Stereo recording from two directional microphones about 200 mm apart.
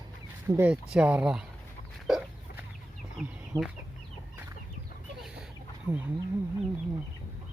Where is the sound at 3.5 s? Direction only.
20° right (ahead or behind).